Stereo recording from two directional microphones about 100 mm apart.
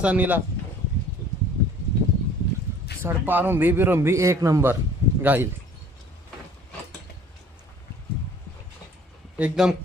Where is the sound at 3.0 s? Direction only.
20° right (ahead or behind).